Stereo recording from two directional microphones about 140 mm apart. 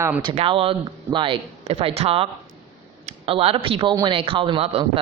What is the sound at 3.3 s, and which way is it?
Speech, 40° right (ahead or behind).